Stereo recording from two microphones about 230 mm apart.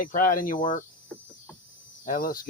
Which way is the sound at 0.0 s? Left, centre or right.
Left.